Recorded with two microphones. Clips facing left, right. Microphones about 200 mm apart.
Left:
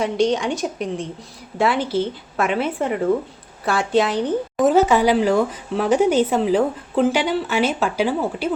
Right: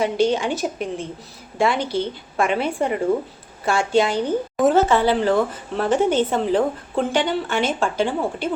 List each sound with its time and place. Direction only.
0.0 s speech: centre (ahead or behind)
4.8 s speech: 10° left (ahead or behind)